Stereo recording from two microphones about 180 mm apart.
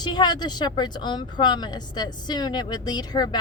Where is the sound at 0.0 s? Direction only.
25° left (ahead or behind).